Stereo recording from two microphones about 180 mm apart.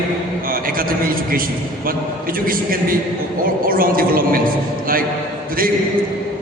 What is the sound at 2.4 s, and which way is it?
A man's voice, 50° right (ahead or behind).